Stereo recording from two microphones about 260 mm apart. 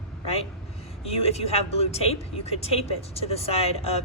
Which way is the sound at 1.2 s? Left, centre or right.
Left.